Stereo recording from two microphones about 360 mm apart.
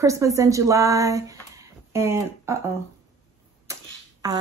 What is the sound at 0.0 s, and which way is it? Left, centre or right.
Speech, centre.